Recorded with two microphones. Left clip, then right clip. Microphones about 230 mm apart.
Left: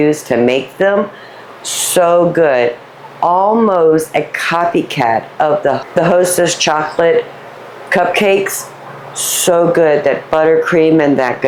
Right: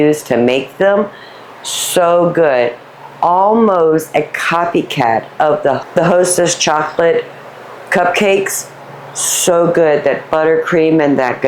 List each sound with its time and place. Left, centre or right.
0.0 s speech: centre